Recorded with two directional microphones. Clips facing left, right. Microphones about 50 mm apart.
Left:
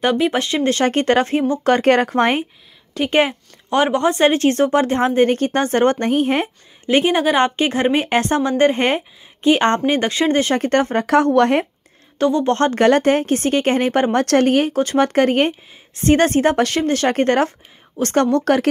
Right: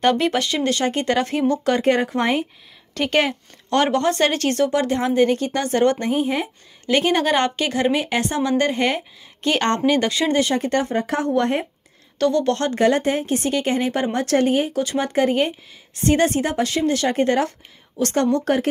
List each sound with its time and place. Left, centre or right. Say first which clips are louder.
0.0 s speech: left 1 dB; centre
0.3 s speech: left 3 dB; left
1.8 s speech: left 4 dB; left
3.1 s speech: left 3 dB; centre; by 6.5 s left
6.9 s speech: left 3 dB; left
9.4 s a woman's voice: left 6 dB; centre
9.7 s speech: left 1 dB; left
11.1 s speech: left 6 dB; left
12.2 s speech: left 2 dB; left
12.7 s speech: left 4 dB; left
14.7 s speech: left 6 dB; left
18.4 s speech: left 4 dB; left